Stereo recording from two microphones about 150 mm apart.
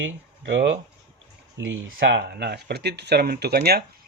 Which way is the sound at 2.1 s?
90° right.